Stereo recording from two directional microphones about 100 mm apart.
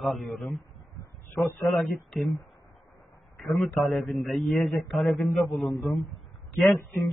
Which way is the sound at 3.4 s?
Centre (ahead or behind).